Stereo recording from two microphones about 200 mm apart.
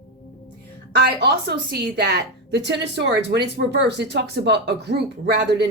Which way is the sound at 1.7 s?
55° right (ahead or behind).